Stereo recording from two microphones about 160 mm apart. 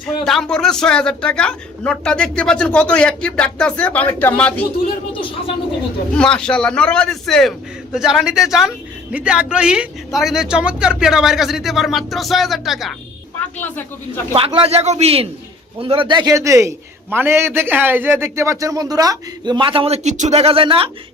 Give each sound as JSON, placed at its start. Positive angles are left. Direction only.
{"t": 0.0, "sound": "a man's voice", "side_deg": 5}
{"t": 6.1, "sound": "a man's voice", "side_deg": 5}
{"t": 13.4, "sound": "speech", "side_deg": 10}
{"t": 14.3, "sound": "a man's voice", "side_deg": -35}